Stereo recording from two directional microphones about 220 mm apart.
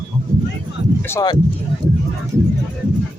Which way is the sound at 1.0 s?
15° left (ahead or behind).